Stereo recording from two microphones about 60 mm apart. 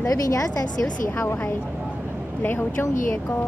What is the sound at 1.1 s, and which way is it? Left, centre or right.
Speech, left.